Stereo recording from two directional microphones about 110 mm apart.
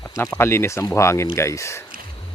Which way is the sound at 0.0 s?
25° left (ahead or behind).